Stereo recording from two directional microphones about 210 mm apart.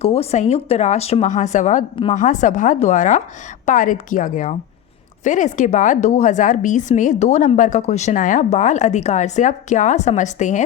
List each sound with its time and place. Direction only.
0.0 s a woman's voice: 30° left (ahead or behind)